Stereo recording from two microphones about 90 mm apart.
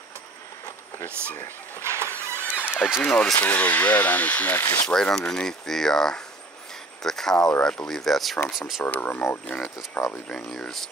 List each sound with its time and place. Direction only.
1.8 s vehicle: 30° right (ahead or behind)
2.5 s a sound: 25° left (ahead or behind)
3.0 s speech: 10° left (ahead or behind); by 8.8 s 5° right (ahead or behind)
8.8 s speech: 20° left (ahead or behind)
10.0 s speech: 5° left (ahead or behind)